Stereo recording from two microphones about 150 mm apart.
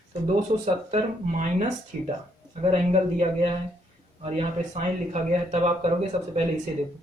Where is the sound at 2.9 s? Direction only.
45° right (ahead or behind).